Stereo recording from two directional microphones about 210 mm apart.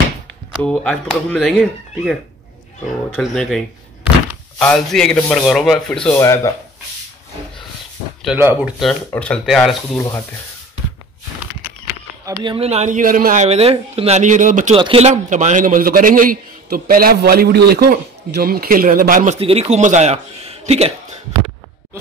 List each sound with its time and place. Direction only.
0.6 s speech: 5° left (ahead or behind)
3.1 s door: centre (ahead or behind)
4.6 s speech: centre (ahead or behind)
8.2 s speech: 5° right (ahead or behind)
12.3 s a man's voice: 25° right (ahead or behind); by 19.3 s 40° right (ahead or behind)
19.4 s a man's voice: 30° right (ahead or behind)